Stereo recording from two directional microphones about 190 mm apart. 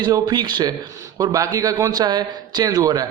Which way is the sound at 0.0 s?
20° right (ahead or behind).